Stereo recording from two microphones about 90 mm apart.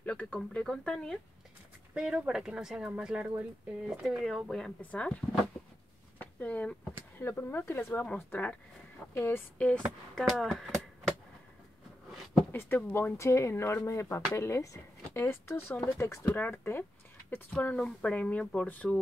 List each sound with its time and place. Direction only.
0.0 s speech: 15° left (ahead or behind)
2.0 s speech: 10° right (ahead or behind); by 5.2 s 15° left (ahead or behind)
6.1 s a sound: 20° left (ahead or behind)
7.2 s speech: 30° left (ahead or behind)
9.1 s speech: 25° left (ahead or behind)
9.6 s speech: 10° left (ahead or behind)
12.5 s speech: 25° left (ahead or behind)
16.3 s speech: 20° left (ahead or behind)